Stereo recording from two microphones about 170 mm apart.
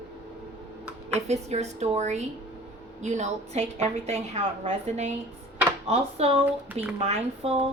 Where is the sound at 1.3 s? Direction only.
40° right (ahead or behind).